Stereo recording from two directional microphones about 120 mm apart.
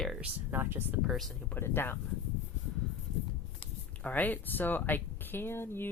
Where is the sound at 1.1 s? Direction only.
Centre (ahead or behind).